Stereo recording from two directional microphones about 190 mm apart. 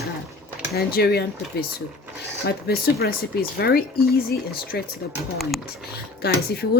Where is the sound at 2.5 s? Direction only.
55° left (ahead or behind).